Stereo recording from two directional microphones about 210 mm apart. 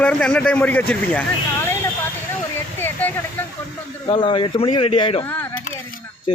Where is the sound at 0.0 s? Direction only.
5° left (ahead or behind).